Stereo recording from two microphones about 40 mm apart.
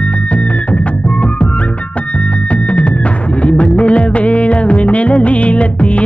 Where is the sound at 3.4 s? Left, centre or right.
Left.